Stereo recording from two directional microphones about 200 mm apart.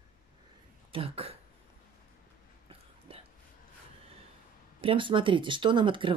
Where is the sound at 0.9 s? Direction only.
25° right (ahead or behind).